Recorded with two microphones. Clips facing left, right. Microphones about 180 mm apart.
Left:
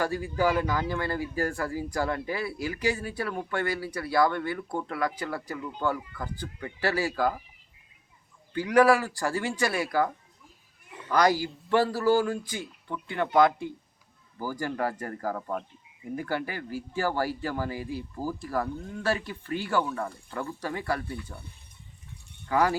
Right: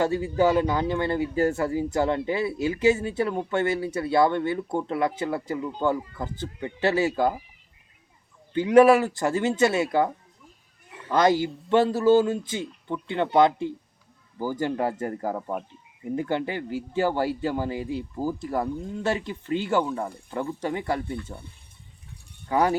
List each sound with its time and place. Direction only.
0.0 s speech: 25° right (ahead or behind)
8.5 s speech: 25° right (ahead or behind)
11.1 s speech: 25° right (ahead or behind)
22.4 s speech: 20° right (ahead or behind)